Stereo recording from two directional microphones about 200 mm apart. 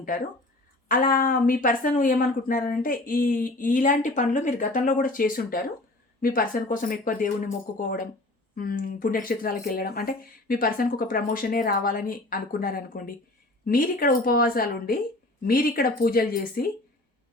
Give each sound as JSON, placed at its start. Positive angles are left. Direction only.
{"t": 0.9, "sound": "speech", "side_deg": 45}